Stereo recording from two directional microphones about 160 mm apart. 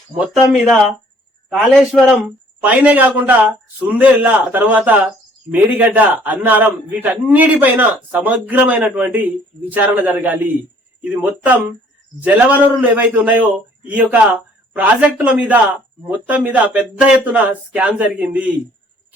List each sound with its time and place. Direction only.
0.2 s a man's voice: centre (ahead or behind)